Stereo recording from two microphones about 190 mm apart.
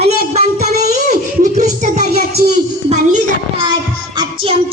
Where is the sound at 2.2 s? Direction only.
50° right (ahead or behind).